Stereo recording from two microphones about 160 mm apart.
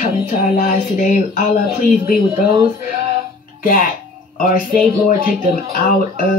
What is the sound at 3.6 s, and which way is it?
Speech, 60° left (ahead or behind).